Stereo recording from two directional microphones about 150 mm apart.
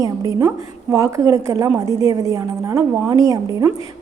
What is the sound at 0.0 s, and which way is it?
A woman's voice, 25° right (ahead or behind).